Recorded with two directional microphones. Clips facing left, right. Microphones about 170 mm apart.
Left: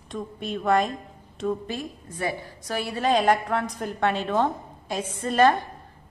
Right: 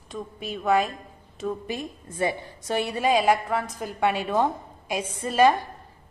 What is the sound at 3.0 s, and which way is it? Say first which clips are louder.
A woman's voice: left 1 dB; 10° right (ahead or behind).